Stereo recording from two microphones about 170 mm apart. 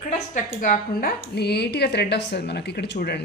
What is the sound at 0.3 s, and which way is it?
Speech, 45° left (ahead or behind).